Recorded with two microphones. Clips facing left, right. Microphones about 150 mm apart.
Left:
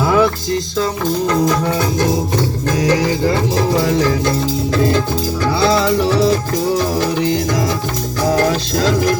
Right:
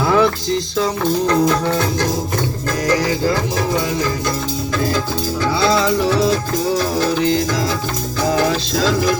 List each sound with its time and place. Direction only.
0.0 s music: 5° left (ahead or behind)
1.3 s music: 5° left (ahead or behind)
4.3 s music: 25° left (ahead or behind)
6.1 s music: 10° left (ahead or behind)